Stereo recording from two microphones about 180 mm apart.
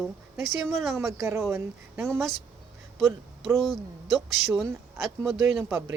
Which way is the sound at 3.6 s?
Centre (ahead or behind).